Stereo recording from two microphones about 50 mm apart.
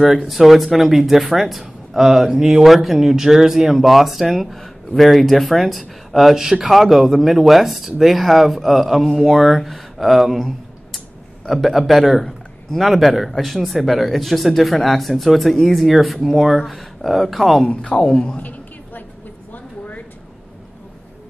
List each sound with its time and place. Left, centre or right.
0.0 s speech: centre
17.9 s speech: centre
18.4 s a sound: left